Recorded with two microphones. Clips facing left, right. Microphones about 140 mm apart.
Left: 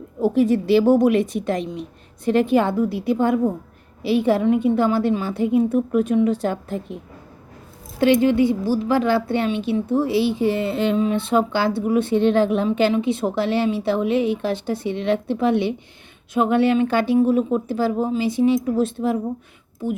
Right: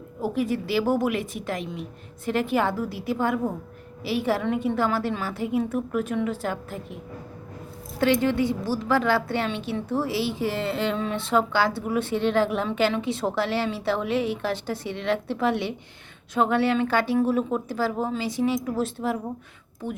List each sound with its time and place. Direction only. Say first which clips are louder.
0.2 s a woman's voice: left 8 dB; 25° left (ahead or behind)